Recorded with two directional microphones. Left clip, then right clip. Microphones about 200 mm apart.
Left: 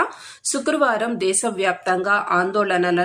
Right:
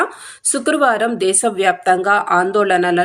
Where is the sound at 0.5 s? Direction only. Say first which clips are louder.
Right 4 dB; 10° right (ahead or behind).